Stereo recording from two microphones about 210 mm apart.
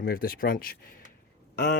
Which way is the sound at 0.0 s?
45° left (ahead or behind).